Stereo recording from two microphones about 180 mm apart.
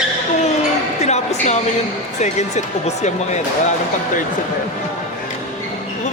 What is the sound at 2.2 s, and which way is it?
Speech, 40° left (ahead or behind).